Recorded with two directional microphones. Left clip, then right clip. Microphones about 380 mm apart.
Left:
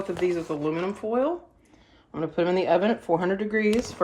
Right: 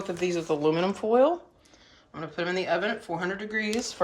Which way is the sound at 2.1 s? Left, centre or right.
Centre.